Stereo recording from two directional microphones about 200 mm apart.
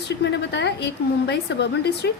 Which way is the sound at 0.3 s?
60° left (ahead or behind).